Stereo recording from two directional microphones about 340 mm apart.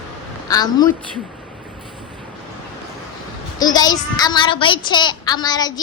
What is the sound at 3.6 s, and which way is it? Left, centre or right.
A woman's voice, centre.